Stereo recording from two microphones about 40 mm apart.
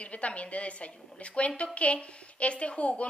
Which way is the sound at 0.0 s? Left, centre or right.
Left.